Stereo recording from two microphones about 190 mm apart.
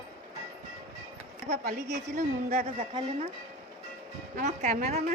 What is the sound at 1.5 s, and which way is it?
A woman's voice, 40° right (ahead or behind).